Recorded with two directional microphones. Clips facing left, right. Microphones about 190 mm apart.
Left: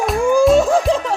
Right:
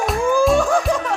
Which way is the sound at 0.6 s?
25° left (ahead or behind).